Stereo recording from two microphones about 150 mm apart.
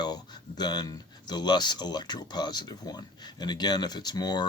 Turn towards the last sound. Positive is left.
turn(degrees=25)  # may be behind; listen again after turning